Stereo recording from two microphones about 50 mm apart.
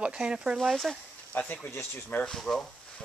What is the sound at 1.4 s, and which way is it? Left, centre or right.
Speech, left.